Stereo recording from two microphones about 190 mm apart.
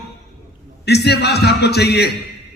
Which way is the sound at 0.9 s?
60° left (ahead or behind).